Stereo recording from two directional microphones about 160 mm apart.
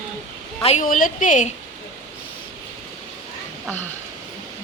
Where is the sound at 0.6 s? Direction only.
55° left (ahead or behind).